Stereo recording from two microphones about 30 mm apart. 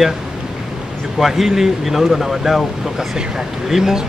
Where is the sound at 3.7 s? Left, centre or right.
Centre.